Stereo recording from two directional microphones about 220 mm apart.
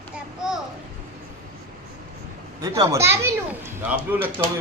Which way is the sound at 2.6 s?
15° right (ahead or behind).